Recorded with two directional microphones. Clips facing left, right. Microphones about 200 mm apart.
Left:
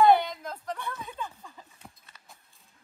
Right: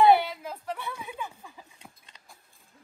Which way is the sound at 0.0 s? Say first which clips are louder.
Right 1 dB; 10° right (ahead or behind).